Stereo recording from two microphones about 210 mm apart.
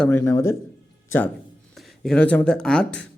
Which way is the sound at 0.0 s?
10° left (ahead or behind).